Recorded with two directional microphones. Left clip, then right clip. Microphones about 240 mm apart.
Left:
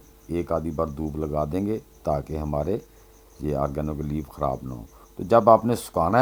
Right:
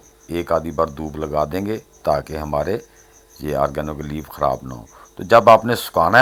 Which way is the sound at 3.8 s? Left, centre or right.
Right.